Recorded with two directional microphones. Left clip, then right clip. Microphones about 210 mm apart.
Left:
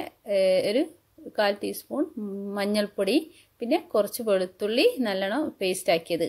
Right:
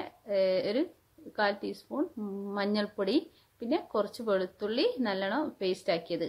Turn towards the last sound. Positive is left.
turn(degrees=40)  # may be behind; listen again after turning